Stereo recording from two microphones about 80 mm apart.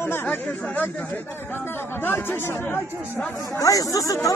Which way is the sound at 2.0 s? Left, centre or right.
Left.